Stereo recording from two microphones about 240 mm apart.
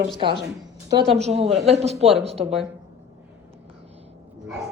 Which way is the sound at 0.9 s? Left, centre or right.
Right.